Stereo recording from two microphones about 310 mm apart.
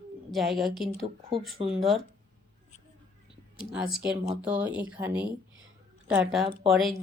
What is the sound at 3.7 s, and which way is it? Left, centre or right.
A woman's voice, centre.